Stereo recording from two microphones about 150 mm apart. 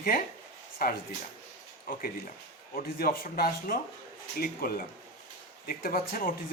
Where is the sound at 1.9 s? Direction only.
75° left (ahead or behind).